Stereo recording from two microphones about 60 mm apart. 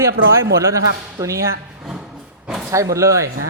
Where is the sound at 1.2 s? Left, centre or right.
Right.